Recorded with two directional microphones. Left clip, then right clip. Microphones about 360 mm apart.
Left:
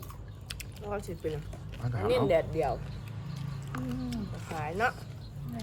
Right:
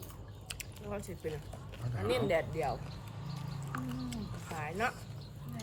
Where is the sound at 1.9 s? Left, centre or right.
Centre.